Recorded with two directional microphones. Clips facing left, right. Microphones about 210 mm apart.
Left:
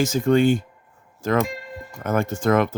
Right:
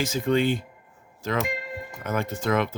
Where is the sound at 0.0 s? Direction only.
45° left (ahead or behind).